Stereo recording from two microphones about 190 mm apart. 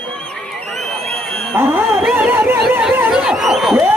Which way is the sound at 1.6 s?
10° right (ahead or behind).